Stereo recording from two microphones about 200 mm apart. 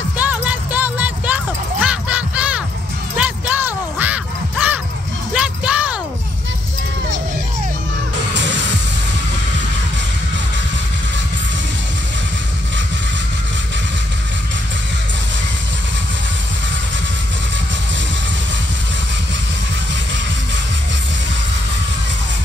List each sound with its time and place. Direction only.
0.2 s music: 5° right (ahead or behind)
3.2 s a sound: 10° right (ahead or behind)
8.4 s music: 65° right (ahead or behind)